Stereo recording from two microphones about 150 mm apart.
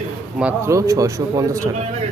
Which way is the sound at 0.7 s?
20° right (ahead or behind).